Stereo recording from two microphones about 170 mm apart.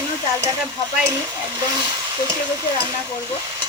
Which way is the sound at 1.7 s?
25° right (ahead or behind).